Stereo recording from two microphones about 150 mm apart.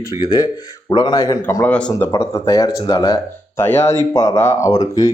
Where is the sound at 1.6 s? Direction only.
10° left (ahead or behind); by 5.1 s 25° left (ahead or behind).